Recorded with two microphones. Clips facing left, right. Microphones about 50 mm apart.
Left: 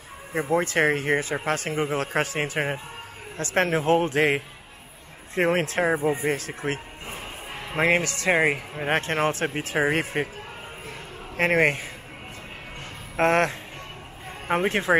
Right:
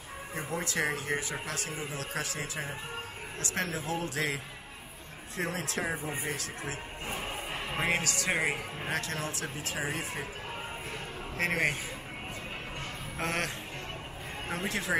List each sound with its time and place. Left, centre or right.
0.3 s speech: left
3.3 s speech: left
7.7 s a man's voice: left
8.0 s speech: left
9.8 s speech: left
11.3 s speech: left
13.2 s speech: left